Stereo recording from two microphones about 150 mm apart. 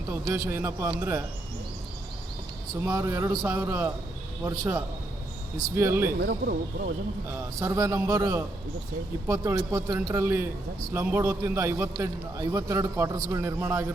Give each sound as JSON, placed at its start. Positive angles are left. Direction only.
{"t": 0.4, "sound": "a man's voice", "side_deg": -15}
{"t": 2.8, "sound": "a man's voice", "side_deg": -20}
{"t": 6.1, "sound": "speech", "side_deg": -90}
{"t": 7.3, "sound": "a man's voice", "side_deg": -15}